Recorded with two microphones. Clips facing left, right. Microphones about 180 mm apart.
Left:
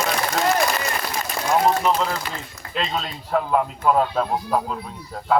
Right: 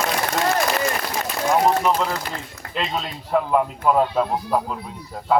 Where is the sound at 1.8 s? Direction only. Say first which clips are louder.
Even; 5° right (ahead or behind).